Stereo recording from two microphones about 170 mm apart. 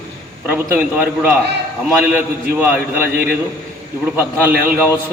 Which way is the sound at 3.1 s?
60° right (ahead or behind).